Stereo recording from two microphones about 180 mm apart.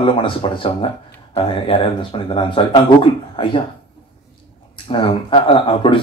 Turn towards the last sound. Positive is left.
turn(degrees=25)  # may be behind; listen again after turning